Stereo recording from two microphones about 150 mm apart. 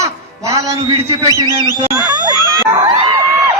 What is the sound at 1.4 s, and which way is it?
Speech, 25° left (ahead or behind).